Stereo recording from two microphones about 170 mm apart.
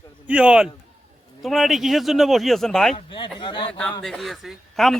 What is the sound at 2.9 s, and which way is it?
Speech, 30° left (ahead or behind).